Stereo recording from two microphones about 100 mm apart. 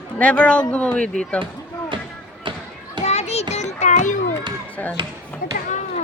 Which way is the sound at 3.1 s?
90° left.